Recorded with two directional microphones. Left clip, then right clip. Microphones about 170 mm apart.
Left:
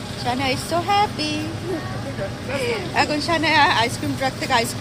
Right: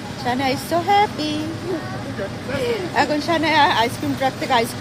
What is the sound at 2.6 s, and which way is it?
Speech, 25° right (ahead or behind).